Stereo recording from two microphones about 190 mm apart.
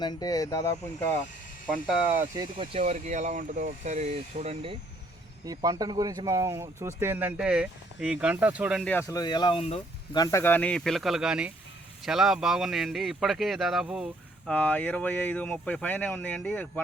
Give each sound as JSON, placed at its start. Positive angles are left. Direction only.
{"t": 0.0, "sound": "speech", "side_deg": 20}
{"t": 1.7, "sound": "speech", "side_deg": -5}
{"t": 2.3, "sound": "speech", "side_deg": -20}
{"t": 2.7, "sound": "speech", "side_deg": -35}
{"t": 5.5, "sound": "speech", "side_deg": -20}
{"t": 8.8, "sound": "speech", "side_deg": 10}
{"t": 10.2, "sound": "speech", "side_deg": 15}
{"t": 14.5, "sound": "speech", "side_deg": 10}